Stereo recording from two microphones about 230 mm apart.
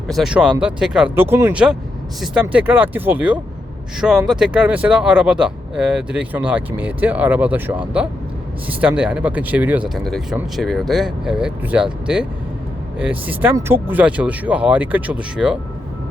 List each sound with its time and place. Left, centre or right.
0.1 s speech: centre
8.8 s speech: centre